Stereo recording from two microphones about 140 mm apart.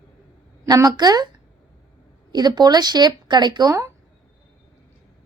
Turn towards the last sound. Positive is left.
turn(degrees=-25)  # may be behind; listen again after turning